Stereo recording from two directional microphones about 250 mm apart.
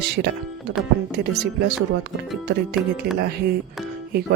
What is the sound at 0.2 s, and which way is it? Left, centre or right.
Speech, right.